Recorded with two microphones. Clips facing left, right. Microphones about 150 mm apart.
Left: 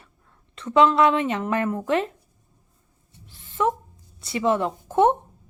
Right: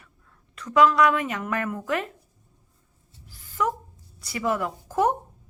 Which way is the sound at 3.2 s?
25° left (ahead or behind).